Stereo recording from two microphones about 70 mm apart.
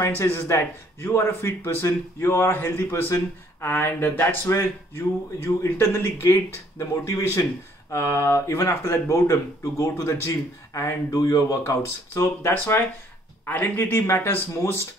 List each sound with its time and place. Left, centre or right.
0.5 s speech: left
6.9 s speech: left
7.9 s speech: left
12.5 s speech: left